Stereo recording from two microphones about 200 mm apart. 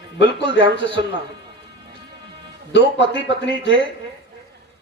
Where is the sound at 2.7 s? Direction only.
60° left (ahead or behind).